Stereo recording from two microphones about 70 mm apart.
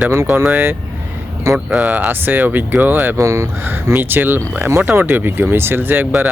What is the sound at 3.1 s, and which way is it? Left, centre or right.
Speech, right.